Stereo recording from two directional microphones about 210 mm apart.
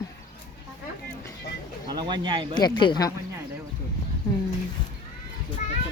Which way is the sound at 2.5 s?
20° left (ahead or behind).